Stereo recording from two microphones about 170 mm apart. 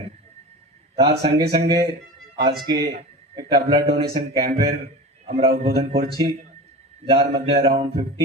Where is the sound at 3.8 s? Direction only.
65° right (ahead or behind).